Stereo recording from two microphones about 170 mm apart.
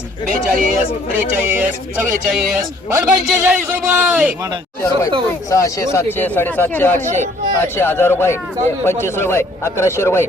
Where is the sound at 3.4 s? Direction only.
10° right (ahead or behind).